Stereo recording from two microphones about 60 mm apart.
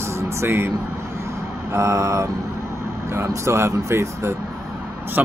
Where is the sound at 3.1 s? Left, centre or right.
Right.